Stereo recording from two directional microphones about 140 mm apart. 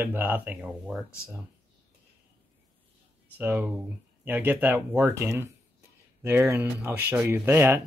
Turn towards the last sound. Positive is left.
turn(degrees=-15)  # may be behind; listen again after turning